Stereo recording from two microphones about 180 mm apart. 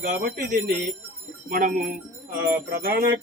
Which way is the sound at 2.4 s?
55° right (ahead or behind).